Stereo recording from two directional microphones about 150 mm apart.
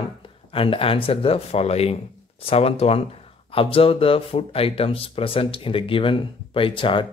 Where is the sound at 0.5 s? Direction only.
35° left (ahead or behind).